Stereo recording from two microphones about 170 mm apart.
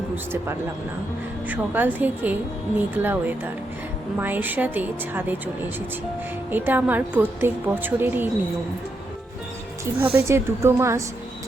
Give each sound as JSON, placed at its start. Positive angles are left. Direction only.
{"t": 1.5, "sound": "speech", "side_deg": -10}
{"t": 6.5, "sound": "speech", "side_deg": -10}
{"t": 10.0, "sound": "speech", "side_deg": -10}